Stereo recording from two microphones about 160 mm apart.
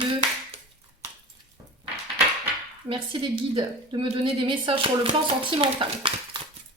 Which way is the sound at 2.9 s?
35° right (ahead or behind).